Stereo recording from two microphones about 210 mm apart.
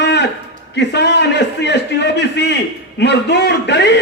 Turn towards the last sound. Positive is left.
turn(degrees=55)  # may be behind; listen again after turning